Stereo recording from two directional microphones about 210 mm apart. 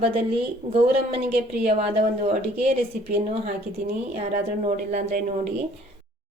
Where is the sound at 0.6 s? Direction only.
40° right (ahead or behind).